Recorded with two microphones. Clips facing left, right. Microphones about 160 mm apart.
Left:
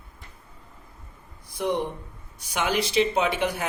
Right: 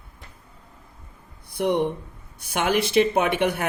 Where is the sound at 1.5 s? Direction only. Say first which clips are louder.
Right 4 dB; 60° right (ahead or behind).